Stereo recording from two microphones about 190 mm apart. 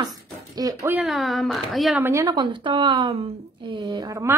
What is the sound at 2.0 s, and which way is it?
A woman's voice, 15° right (ahead or behind).